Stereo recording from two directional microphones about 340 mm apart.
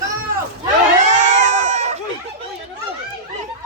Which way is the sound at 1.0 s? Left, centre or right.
Right.